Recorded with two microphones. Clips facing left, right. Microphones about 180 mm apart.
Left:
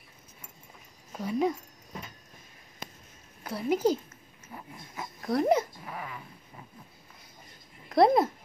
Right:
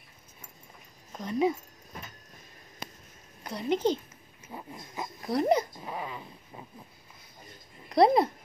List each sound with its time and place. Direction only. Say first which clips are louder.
1.1 s speech: right 1 dB; 5° left (ahead or behind)
3.4 s a woman's voice: left 1 dB; 5° left (ahead or behind)
4.5 s dog: right 3 dB; 20° right (ahead or behind)
5.2 s a woman's voice: left 1 dB; centre (ahead or behind)
5.9 s speech: right 3 dB; 25° right (ahead or behind)
7.9 s speech: even; centre (ahead or behind)